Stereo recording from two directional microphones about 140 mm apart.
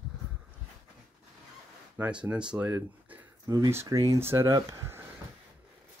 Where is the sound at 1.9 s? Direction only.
10° right (ahead or behind).